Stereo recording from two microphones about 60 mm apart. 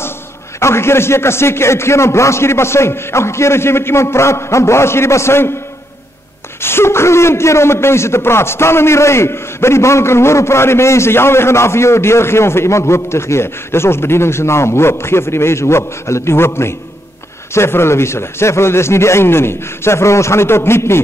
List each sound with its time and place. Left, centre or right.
0.6 s a man's voice: left
6.6 s a man's voice: left